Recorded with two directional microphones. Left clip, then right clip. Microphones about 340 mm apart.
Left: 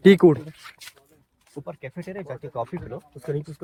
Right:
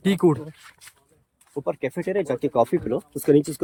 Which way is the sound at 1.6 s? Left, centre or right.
Right.